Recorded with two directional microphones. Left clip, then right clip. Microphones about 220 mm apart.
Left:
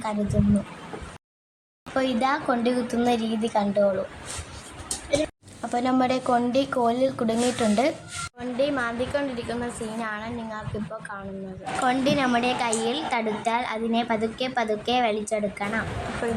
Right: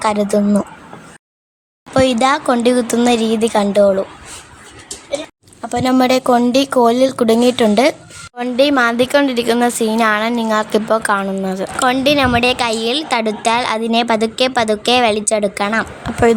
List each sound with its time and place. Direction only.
1.9 s speech: 45° right (ahead or behind)
5.6 s speech: 40° right (ahead or behind)